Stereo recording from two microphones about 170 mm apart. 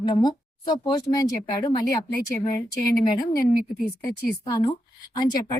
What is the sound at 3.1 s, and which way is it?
Speech, 25° left (ahead or behind).